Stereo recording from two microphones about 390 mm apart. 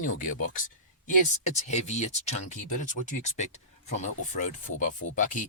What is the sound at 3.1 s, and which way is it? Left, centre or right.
Speech, centre.